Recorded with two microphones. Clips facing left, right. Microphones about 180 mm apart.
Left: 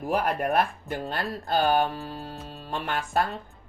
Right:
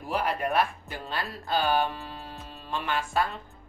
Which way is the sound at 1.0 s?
40° left (ahead or behind).